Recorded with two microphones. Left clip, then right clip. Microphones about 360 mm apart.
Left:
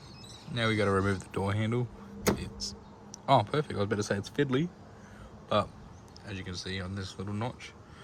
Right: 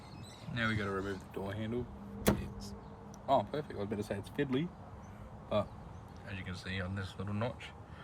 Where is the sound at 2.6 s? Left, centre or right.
Left.